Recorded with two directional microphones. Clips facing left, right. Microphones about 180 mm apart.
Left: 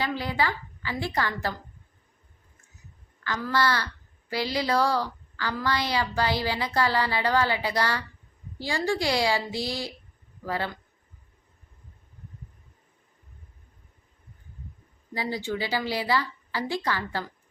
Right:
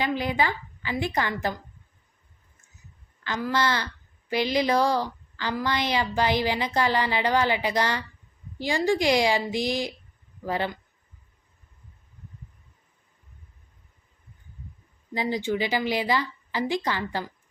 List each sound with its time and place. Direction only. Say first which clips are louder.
0.0 s speech: right 2 dB; 20° right (ahead or behind)
3.2 s a woman's voice: even; 20° right (ahead or behind)
15.1 s speech: right 4 dB; 20° right (ahead or behind)